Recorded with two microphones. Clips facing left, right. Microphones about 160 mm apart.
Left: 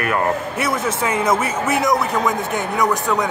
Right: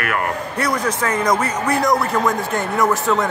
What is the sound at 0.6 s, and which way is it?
Speech, 5° left (ahead or behind).